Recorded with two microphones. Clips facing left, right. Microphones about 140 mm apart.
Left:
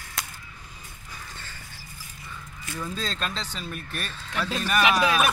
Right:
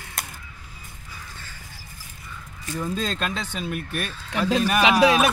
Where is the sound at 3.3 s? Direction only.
55° right (ahead or behind).